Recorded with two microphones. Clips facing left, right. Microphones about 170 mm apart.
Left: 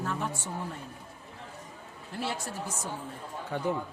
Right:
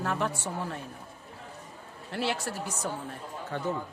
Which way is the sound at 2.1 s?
80° right.